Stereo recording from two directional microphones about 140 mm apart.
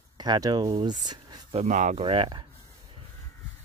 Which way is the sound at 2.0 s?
35° right (ahead or behind).